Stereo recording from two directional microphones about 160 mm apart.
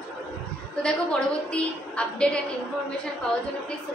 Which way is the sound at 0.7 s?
5° left (ahead or behind).